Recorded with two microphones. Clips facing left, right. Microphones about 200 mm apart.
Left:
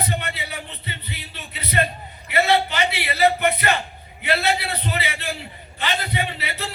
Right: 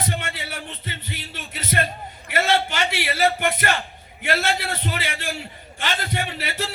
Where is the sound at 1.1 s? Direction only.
90° right.